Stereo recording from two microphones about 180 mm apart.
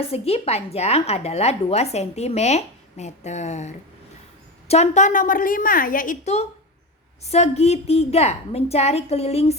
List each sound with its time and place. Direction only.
0.1 s a woman's voice: 35° left (ahead or behind)